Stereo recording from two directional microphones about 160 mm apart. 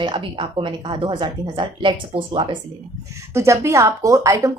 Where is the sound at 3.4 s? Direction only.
20° right (ahead or behind).